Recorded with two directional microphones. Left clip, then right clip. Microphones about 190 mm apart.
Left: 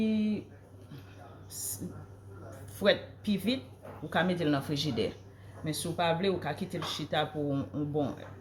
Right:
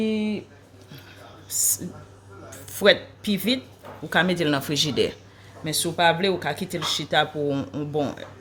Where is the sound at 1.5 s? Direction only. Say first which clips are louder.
Right 17 dB; 55° right (ahead or behind).